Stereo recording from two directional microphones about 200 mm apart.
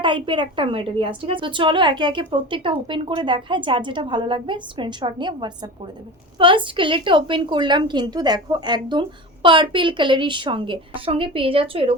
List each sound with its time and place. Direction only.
0.0 s a woman's voice: 25° right (ahead or behind)